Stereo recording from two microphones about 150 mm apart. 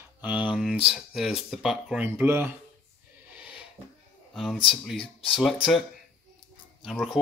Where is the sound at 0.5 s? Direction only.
5° right (ahead or behind).